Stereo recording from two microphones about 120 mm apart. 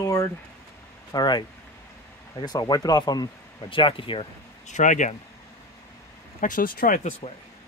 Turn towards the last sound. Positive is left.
turn(degrees=85)